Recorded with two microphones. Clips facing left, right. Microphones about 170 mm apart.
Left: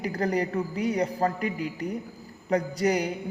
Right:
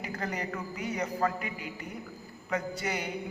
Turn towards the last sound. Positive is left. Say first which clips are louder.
# left 9 dB
turn(degrees=40)  # may be behind; listen again after turning